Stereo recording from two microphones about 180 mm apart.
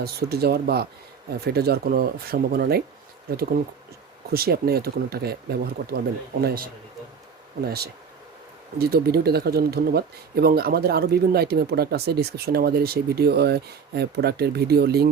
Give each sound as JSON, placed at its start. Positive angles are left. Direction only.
{"t": 0.0, "sound": "speech", "side_deg": -60}
{"t": 4.3, "sound": "speech", "side_deg": -60}